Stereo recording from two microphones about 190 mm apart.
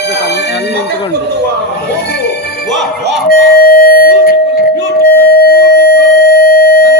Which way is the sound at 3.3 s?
55° left (ahead or behind).